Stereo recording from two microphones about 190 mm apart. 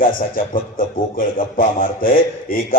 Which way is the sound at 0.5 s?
50° left (ahead or behind).